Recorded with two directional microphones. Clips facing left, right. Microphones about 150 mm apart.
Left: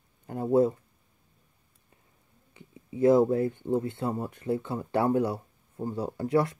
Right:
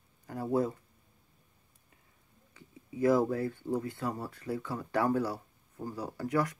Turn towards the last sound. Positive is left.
turn(degrees=25)  # may be behind; listen again after turning